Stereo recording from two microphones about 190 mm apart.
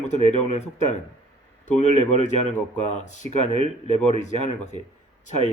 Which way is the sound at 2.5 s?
40° left (ahead or behind).